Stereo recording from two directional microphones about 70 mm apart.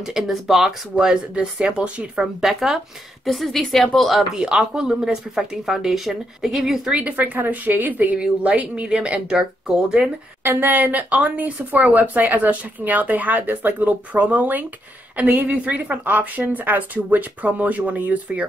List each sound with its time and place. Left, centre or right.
0.0 s speech: centre
7.0 s speech: right
10.4 s speech: right